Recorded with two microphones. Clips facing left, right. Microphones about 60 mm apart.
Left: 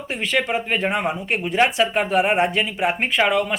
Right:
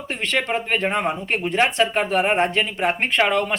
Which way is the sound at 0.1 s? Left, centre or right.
Centre.